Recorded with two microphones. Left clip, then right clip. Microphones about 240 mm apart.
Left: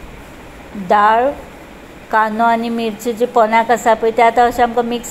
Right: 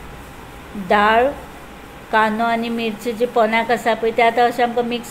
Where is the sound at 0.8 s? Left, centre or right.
Centre.